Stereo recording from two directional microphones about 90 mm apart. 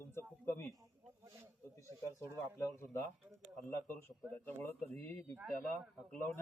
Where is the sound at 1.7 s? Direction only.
35° left (ahead or behind).